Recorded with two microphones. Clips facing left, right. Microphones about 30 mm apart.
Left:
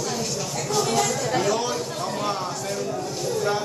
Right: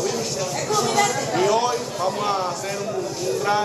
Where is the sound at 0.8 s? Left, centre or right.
Right; by 2.4 s centre.